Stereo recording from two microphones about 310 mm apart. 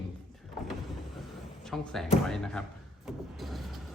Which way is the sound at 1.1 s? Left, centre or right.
Centre.